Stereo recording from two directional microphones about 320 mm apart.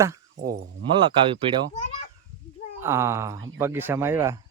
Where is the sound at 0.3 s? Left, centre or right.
Right.